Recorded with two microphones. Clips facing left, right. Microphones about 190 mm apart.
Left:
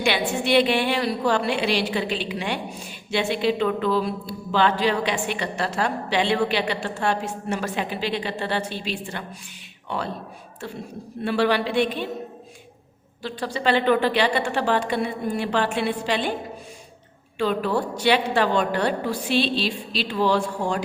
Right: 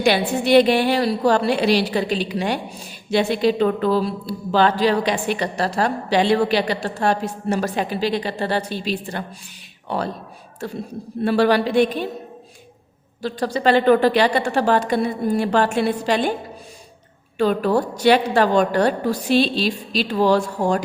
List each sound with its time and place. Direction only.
0.0 s speech: 40° right (ahead or behind)
13.2 s speech: 40° right (ahead or behind)
17.3 s a woman's voice: 45° right (ahead or behind)